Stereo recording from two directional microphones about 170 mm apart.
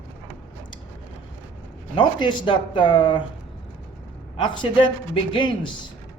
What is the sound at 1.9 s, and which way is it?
Speech, 30° left (ahead or behind).